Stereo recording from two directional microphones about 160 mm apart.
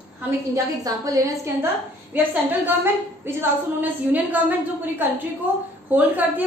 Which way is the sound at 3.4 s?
10° right (ahead or behind).